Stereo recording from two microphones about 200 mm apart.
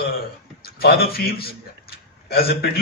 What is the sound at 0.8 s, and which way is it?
A man's voice, 50° left (ahead or behind).